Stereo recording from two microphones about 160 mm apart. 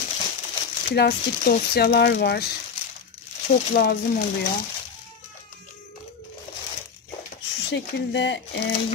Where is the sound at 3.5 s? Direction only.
70° left (ahead or behind).